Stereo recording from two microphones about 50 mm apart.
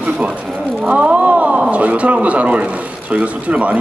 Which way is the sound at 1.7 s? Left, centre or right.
Right.